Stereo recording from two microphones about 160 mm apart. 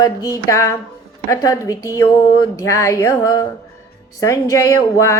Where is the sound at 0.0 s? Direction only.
20° left (ahead or behind).